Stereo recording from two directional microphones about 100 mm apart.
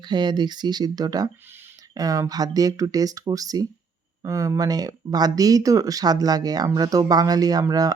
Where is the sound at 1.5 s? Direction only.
25° right (ahead or behind).